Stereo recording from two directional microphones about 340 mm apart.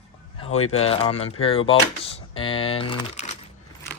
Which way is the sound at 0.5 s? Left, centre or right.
Centre.